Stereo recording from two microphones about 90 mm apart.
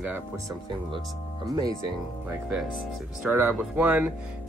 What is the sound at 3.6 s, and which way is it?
Speech, 20° right (ahead or behind).